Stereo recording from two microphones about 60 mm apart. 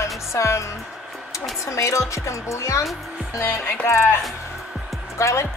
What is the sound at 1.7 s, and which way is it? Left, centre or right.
Speech, left.